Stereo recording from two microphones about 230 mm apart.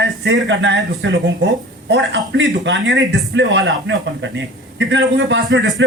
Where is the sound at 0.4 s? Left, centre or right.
Right.